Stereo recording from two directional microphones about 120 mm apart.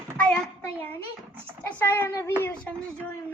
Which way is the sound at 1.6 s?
15° left (ahead or behind).